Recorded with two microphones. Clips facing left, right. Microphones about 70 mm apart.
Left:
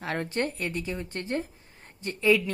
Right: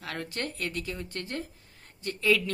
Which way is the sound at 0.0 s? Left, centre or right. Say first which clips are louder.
Left 6 dB; left.